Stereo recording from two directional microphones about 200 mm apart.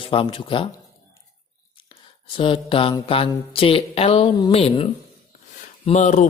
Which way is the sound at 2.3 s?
25° left (ahead or behind).